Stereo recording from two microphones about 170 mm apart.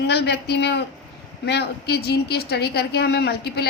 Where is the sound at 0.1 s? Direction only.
75° left (ahead or behind).